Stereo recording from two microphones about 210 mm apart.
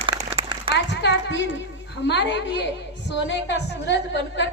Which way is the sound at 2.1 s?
55° left (ahead or behind).